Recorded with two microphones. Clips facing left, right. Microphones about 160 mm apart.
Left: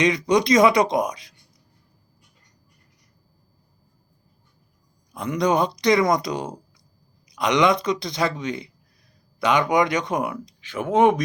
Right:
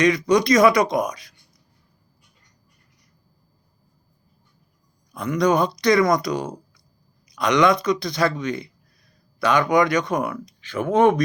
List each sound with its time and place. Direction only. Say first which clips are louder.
0.0 s speech: right 2 dB; 20° left (ahead or behind)
5.1 s speech: right 2 dB; 20° left (ahead or behind)